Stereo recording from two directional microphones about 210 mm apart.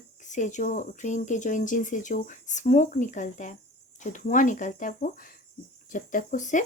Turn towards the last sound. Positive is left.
turn(degrees=35)  # may be behind; listen again after turning